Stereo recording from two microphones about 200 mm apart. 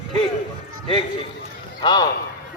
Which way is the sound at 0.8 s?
25° left (ahead or behind).